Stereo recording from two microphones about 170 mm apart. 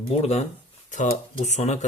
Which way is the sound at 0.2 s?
40° left (ahead or behind).